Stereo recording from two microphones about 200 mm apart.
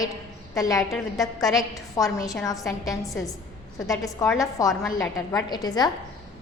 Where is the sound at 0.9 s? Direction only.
Centre (ahead or behind).